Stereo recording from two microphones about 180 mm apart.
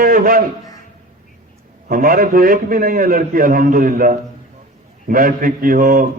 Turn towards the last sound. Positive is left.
turn(degrees=-50)  # may be behind; listen again after turning